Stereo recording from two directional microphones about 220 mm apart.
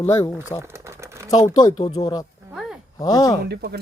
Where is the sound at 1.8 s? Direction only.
30° left (ahead or behind).